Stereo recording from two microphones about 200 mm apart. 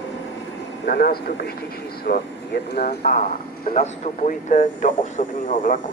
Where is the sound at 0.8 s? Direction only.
45° left (ahead or behind).